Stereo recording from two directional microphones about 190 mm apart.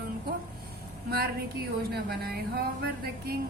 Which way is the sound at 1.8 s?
55° right (ahead or behind).